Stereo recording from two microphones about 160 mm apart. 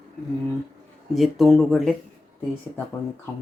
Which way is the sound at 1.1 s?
Centre (ahead or behind).